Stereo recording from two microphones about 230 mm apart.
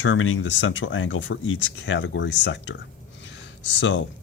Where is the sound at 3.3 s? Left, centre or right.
Left.